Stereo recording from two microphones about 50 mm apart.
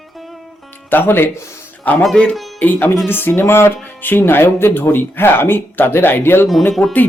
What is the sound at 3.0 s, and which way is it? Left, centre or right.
Speech, left.